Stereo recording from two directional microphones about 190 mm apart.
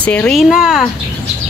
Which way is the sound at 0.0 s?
5° left (ahead or behind).